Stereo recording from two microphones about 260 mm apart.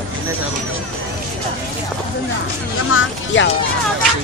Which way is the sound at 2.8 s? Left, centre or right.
Left.